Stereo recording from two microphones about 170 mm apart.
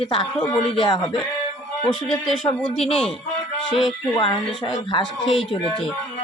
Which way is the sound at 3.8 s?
30° left (ahead or behind).